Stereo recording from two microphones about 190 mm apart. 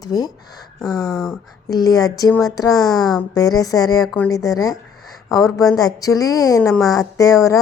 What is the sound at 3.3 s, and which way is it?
Speech, 20° left (ahead or behind).